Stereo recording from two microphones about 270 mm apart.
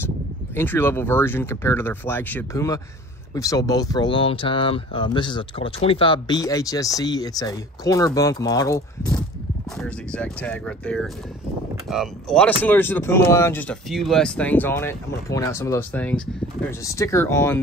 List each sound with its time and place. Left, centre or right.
0.6 s speech: centre